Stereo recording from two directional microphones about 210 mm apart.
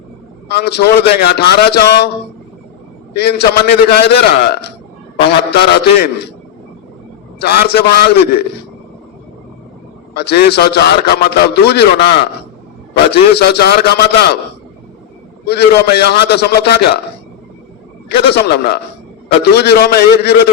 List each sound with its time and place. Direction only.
0.4 s a man's voice: 50° left (ahead or behind)
3.2 s a man's voice: 50° left (ahead or behind)
7.3 s a man's voice: 50° left (ahead or behind)
10.2 s a man's voice: 50° left (ahead or behind)
15.4 s a man's voice: 50° left (ahead or behind)
18.1 s a man's voice: 50° left (ahead or behind)